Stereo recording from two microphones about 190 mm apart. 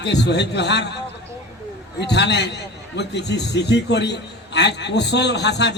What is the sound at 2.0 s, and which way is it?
A man's voice, 65° left (ahead or behind).